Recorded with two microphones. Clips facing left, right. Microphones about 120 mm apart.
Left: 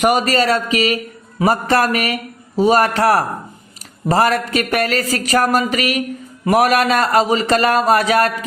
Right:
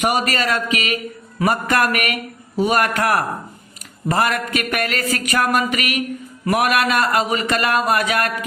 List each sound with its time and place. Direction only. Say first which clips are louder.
0.0 s speech: left 5 dB; 35° left (ahead or behind)